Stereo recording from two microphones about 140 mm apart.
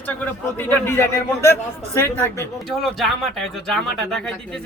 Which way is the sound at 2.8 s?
Centre (ahead or behind).